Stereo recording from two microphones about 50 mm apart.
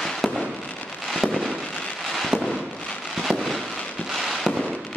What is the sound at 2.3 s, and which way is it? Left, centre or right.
Fireworks, centre.